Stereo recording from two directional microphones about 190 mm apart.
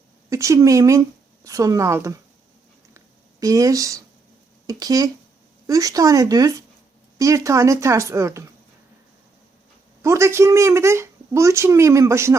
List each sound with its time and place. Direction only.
0.3 s speech: 15° right (ahead or behind)
3.4 s speech: 20° right (ahead or behind)
10.0 s speech: 15° right (ahead or behind)